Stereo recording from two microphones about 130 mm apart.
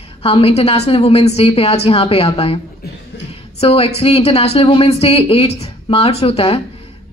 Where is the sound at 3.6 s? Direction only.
50° left (ahead or behind).